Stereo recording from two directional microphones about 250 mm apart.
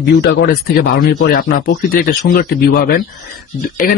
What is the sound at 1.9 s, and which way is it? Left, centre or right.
Speech, left.